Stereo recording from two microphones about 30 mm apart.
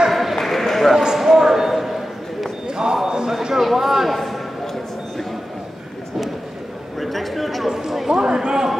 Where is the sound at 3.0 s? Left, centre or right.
Right.